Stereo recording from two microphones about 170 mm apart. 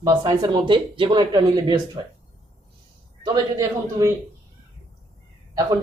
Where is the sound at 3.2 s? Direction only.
20° right (ahead or behind).